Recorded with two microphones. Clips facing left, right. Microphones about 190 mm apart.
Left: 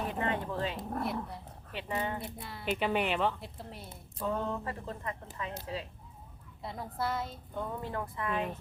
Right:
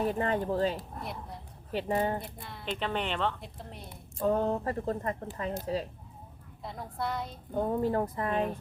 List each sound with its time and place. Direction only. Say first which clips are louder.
0.1 s speech: right 4 dB; 40° right (ahead or behind)
2.4 s a woman's voice: left 2 dB; centre (ahead or behind)
4.2 s speech: right 6 dB; 40° right (ahead or behind)
6.6 s a woman's voice: even; centre (ahead or behind)
7.5 s speech: right 10 dB; 40° right (ahead or behind)